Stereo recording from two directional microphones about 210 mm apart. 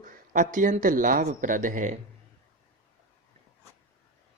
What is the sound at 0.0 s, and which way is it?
Speech, 40° right (ahead or behind).